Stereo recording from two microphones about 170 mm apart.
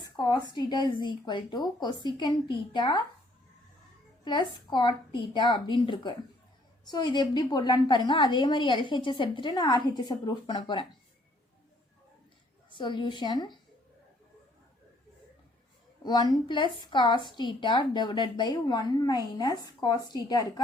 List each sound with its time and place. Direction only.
0.2 s a woman's voice: 25° left (ahead or behind)
4.2 s a woman's voice: 25° left (ahead or behind)
12.7 s a woman's voice: 30° left (ahead or behind)
16.0 s a woman's voice: 25° left (ahead or behind)